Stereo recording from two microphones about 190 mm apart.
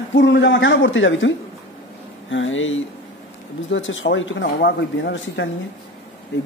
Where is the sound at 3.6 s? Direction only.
80° left.